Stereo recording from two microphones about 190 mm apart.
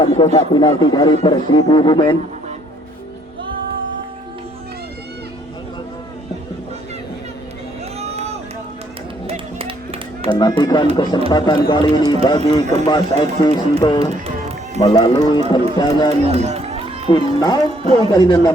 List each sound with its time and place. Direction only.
0.3 s speech: 20° left (ahead or behind)
7.9 s vehicle: 35° right (ahead or behind)
9.2 s music: 30° right (ahead or behind)
10.2 s speech: 20° left (ahead or behind)
16.2 s run: 35° right (ahead or behind)
17.1 s speech: 25° left (ahead or behind)